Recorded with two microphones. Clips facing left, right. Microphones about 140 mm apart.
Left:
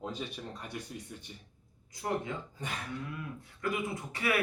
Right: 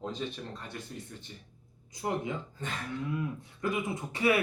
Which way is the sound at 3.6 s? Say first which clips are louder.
Right 2 dB; 25° right (ahead or behind).